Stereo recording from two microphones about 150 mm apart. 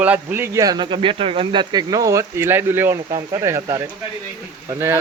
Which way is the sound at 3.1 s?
30° right (ahead or behind).